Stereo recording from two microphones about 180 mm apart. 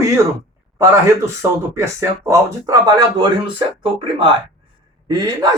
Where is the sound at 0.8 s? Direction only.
15° right (ahead or behind).